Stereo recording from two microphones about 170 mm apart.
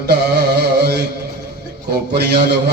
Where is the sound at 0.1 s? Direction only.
70° right (ahead or behind).